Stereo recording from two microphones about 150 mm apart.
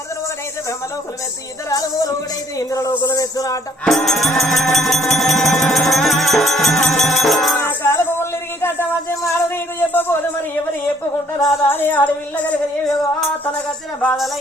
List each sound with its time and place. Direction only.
1.7 s speech: 25° left (ahead or behind)
3.8 s music: centre (ahead or behind)
7.6 s a sound: 15° left (ahead or behind)
11.3 s music: 20° left (ahead or behind)